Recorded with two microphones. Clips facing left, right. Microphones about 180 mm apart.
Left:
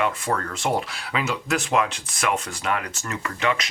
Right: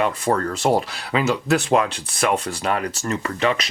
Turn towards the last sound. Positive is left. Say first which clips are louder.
# right 4 dB
turn(degrees=-35)  # may be behind; listen again after turning